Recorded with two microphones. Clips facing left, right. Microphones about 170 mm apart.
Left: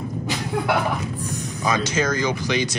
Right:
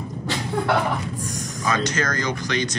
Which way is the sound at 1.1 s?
40° right (ahead or behind).